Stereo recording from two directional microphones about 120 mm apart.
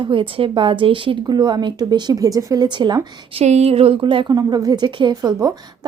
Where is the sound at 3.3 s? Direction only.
60° right (ahead or behind); by 5.6 s 35° right (ahead or behind).